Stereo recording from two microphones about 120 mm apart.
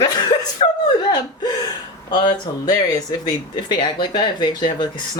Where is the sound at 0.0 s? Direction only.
35° left (ahead or behind).